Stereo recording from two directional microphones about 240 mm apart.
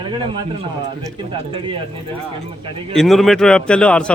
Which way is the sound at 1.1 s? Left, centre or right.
Right.